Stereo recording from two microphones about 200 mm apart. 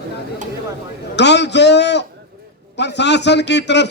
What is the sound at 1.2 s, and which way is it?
A man's voice, 60° left (ahead or behind).